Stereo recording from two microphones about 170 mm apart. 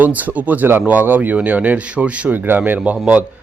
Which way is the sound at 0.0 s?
10° right (ahead or behind).